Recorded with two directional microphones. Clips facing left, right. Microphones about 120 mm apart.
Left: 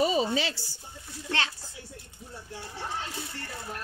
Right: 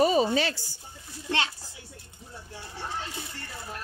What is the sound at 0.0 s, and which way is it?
Speech, 50° right (ahead or behind).